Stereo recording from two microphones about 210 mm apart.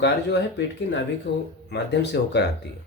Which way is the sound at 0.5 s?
60° left (ahead or behind).